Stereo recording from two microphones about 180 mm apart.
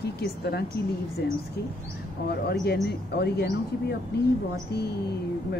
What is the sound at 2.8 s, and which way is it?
Speech, 65° left (ahead or behind).